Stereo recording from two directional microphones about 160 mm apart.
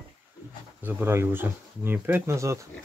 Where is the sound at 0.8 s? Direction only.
15° right (ahead or behind).